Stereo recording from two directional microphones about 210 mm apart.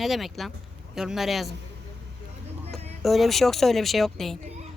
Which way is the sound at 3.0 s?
Centre (ahead or behind).